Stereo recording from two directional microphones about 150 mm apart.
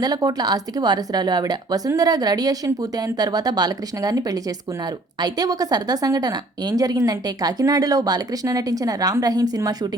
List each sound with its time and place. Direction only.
0.0 s a woman's voice: 25° right (ahead or behind)